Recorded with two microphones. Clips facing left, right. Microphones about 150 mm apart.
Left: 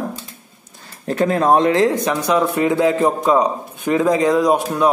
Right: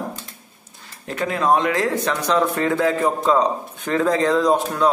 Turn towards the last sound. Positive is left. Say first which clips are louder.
# left 2 dB
turn(degrees=15)  # may be behind; listen again after turning